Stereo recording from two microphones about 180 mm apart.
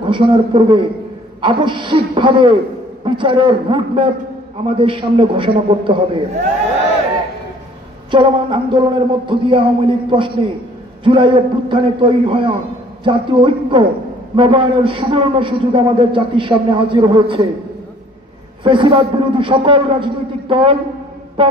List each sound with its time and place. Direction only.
0.0 s a man's voice: 30° right (ahead or behind)
8.1 s a man's voice: 25° right (ahead or behind)
18.6 s a man's voice: 25° right (ahead or behind)